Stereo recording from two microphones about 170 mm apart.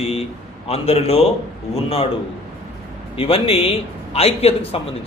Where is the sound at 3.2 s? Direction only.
35° left (ahead or behind).